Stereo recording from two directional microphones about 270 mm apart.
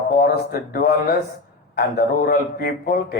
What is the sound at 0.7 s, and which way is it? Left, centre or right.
Speech, left.